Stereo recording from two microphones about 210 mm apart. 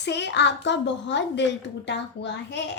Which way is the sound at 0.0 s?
55° left (ahead or behind).